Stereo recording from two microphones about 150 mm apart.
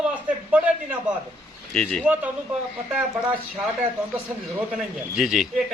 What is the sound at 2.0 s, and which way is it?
Speech, 10° right (ahead or behind).